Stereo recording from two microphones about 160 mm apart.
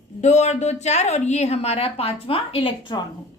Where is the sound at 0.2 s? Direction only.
45° left (ahead or behind); by 3.1 s 30° left (ahead or behind).